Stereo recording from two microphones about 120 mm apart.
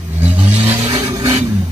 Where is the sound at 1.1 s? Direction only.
25° right (ahead or behind).